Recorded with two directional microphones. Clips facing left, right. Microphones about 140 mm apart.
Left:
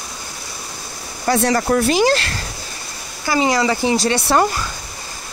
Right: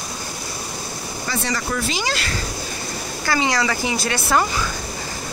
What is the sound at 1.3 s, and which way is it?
Speech, 65° left (ahead or behind).